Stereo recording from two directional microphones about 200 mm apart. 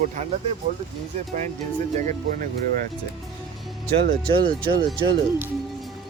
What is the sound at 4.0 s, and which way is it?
Speech, 50° right (ahead or behind).